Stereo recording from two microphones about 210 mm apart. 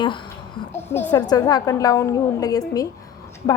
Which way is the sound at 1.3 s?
20° left (ahead or behind).